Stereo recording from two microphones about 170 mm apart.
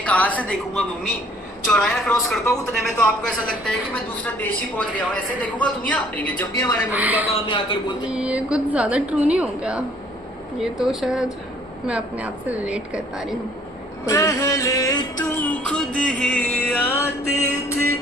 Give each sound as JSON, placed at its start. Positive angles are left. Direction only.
{"t": 0.0, "sound": "a man's voice", "side_deg": 10}
{"t": 6.9, "sound": "a woman's voice", "side_deg": -10}
{"t": 7.3, "sound": "a man's voice", "side_deg": 30}
{"t": 8.0, "sound": "a woman's voice", "side_deg": -5}
{"t": 14.0, "sound": "a man's voice", "side_deg": 20}